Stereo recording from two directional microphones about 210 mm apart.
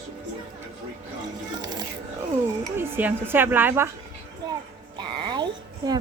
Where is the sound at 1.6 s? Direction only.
20° right (ahead or behind).